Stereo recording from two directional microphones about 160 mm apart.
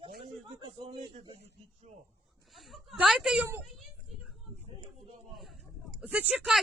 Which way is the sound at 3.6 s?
Centre (ahead or behind).